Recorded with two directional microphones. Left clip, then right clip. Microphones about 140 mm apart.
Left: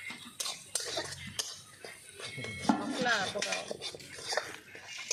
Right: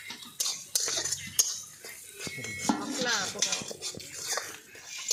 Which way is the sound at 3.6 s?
30° left (ahead or behind).